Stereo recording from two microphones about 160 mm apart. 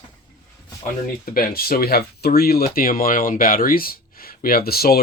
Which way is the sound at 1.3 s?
70° left (ahead or behind).